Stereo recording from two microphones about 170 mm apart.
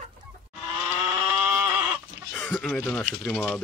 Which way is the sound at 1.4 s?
10° right (ahead or behind).